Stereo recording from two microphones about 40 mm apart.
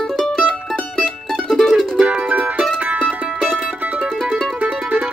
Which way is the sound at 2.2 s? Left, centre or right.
Right.